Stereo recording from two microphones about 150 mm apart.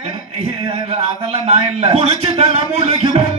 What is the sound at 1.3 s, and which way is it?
A man's voice, 40° right (ahead or behind).